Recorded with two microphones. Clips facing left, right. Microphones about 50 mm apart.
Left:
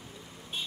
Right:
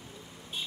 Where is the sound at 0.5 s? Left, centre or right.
Left.